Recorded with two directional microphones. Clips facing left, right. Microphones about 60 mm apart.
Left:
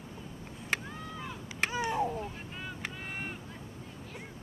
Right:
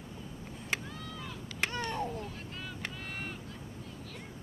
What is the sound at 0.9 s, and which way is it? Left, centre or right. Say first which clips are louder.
Chop: left 2 dB; left.